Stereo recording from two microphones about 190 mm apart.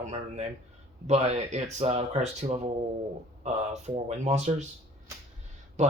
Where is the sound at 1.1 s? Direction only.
35° right (ahead or behind).